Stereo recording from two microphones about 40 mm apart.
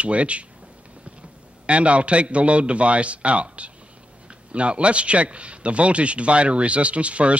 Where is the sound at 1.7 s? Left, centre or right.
Right.